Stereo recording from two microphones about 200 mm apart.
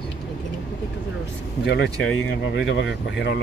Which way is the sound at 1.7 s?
65° left (ahead or behind).